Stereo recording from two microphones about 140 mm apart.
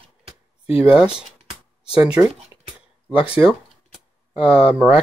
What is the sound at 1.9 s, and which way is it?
Speech, 10° right (ahead or behind).